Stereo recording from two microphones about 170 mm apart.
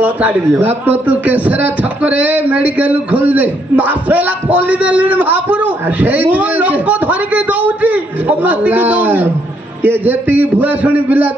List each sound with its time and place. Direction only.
0.0 s a man's voice: 10° right (ahead or behind)